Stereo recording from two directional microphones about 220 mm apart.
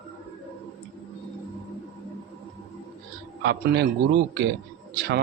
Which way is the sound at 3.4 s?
50° right (ahead or behind).